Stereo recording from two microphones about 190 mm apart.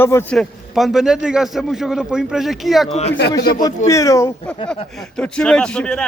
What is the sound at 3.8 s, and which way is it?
A man's voice, 15° left (ahead or behind).